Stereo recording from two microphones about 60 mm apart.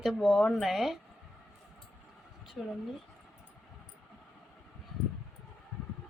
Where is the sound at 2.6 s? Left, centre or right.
Centre.